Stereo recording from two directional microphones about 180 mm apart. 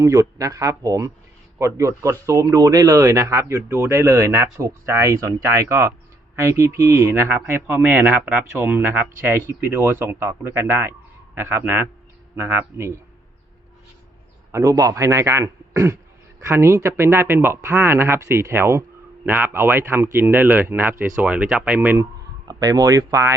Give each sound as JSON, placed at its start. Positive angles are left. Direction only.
{"t": 0.0, "sound": "speech", "side_deg": -20}
{"t": 14.5, "sound": "speech", "side_deg": -20}